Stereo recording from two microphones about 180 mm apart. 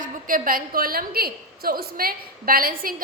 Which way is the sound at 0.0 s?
50° right (ahead or behind).